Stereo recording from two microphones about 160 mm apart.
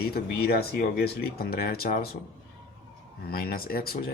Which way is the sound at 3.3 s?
70° left (ahead or behind).